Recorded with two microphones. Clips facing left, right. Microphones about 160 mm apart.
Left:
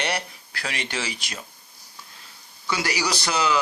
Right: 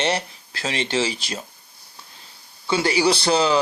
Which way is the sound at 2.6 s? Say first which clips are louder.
Right 7 dB; 25° right (ahead or behind).